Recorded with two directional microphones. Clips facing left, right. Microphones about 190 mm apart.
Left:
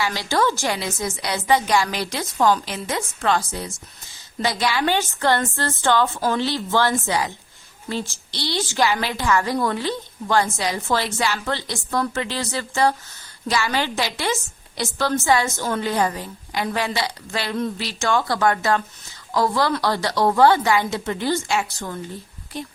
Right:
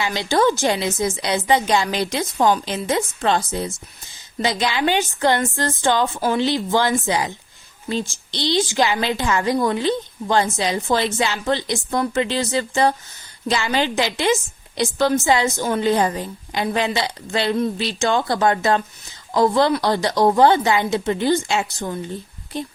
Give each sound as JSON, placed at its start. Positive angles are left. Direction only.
{"t": 0.0, "sound": "a woman's voice", "side_deg": -20}